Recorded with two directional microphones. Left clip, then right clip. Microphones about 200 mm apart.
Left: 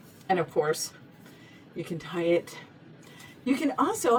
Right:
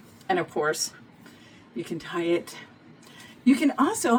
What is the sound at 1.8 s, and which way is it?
A woman's voice, 20° right (ahead or behind).